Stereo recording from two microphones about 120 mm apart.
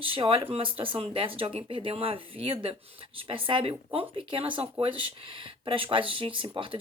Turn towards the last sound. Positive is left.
turn(degrees=-45)  # may be behind; listen again after turning